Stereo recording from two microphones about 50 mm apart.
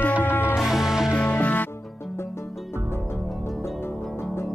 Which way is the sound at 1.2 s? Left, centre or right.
Left.